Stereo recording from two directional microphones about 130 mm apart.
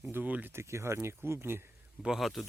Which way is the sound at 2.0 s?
Centre (ahead or behind).